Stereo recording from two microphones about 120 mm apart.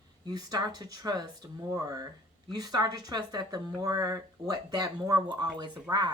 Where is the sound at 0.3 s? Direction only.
35° right (ahead or behind).